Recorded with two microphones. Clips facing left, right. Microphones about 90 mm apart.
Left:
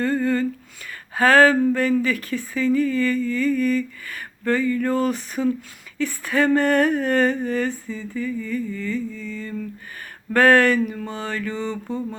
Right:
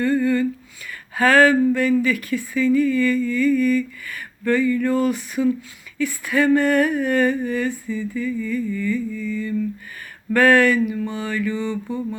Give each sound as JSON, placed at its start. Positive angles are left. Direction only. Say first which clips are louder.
{"t": 0.0, "sound": "a sound", "louder": "right 2 dB", "side_deg": 35}
{"t": 0.9, "sound": "speech", "louder": "even", "side_deg": 35}
{"t": 7.9, "sound": "mantra", "louder": "right 3 dB", "side_deg": 25}
{"t": 10.3, "sound": "speech", "louder": "even", "side_deg": 35}